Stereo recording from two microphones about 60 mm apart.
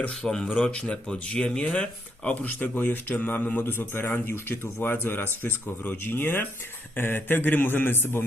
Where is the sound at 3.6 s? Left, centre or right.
Left.